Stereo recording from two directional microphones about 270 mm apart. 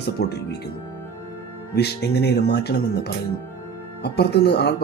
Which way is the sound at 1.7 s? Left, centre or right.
Left.